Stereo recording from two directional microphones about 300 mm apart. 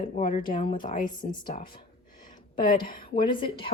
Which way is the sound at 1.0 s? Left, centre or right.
Centre.